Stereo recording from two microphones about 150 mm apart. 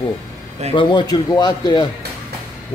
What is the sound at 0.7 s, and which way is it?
A man's voice, 30° left (ahead or behind).